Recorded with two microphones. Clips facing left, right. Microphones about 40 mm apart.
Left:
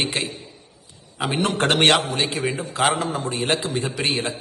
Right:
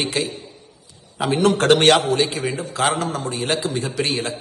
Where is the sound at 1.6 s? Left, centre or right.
Left.